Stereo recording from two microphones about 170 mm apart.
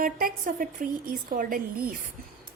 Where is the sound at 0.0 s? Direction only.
55° right (ahead or behind).